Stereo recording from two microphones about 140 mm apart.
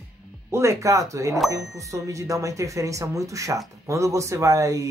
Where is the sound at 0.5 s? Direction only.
20° right (ahead or behind).